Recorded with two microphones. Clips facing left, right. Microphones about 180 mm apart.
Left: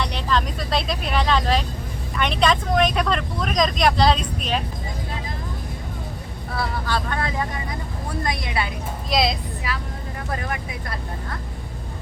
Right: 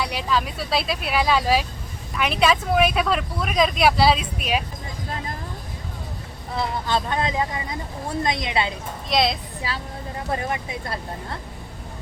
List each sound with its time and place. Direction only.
0.0 s speech: 5° right (ahead or behind)
6.6 s speech: 20° right (ahead or behind)
9.0 s speech: centre (ahead or behind)
9.7 s speech: 30° right (ahead or behind)